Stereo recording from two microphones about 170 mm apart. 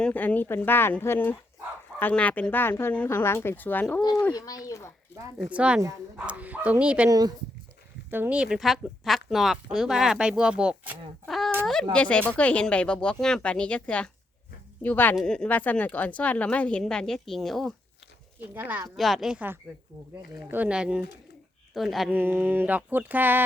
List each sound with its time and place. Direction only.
0.0 s a woman's voice: 10° left (ahead or behind)
5.4 s speech: 5° right (ahead or behind)
7.1 s speech: 25° right (ahead or behind)
8.1 s a woman's voice: 10° right (ahead or behind)
18.5 s speech: 10° right (ahead or behind)
18.9 s speech: centre (ahead or behind)
22.1 s speech: 15° right (ahead or behind)